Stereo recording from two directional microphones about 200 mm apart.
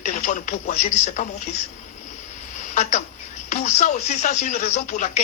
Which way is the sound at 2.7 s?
35° left (ahead or behind).